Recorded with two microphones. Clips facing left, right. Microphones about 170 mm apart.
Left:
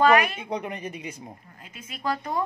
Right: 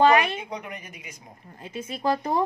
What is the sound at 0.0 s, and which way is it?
Speech, 30° right (ahead or behind).